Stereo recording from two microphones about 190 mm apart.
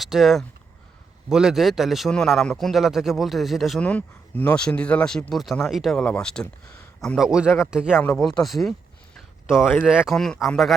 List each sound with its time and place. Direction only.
0.0 s a man's voice: centre (ahead or behind)
6.4 s speech: 15° left (ahead or behind)
7.0 s a man's voice: centre (ahead or behind)
9.1 s a sound: centre (ahead or behind)
9.8 s a man's voice: 5° right (ahead or behind)